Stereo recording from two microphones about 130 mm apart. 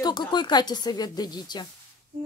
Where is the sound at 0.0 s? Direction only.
35° left (ahead or behind).